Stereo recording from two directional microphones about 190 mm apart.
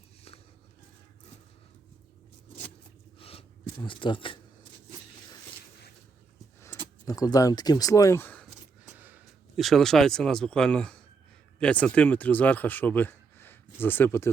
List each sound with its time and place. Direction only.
3.2 s a sound: 30° left (ahead or behind)
7.0 s speech: 20° left (ahead or behind)
8.9 s speech: 10° right (ahead or behind); by 14.3 s 10° left (ahead or behind)